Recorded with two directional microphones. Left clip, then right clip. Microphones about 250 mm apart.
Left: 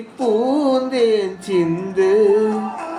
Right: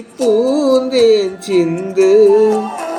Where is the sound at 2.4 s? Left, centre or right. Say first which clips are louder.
Right 7 dB; right.